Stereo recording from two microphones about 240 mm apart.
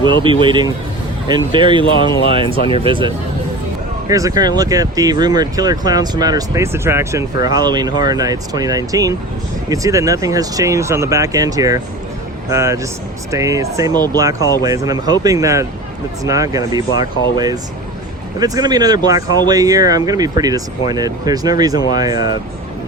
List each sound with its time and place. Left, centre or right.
0.0 s speech: centre
4.1 s speech: centre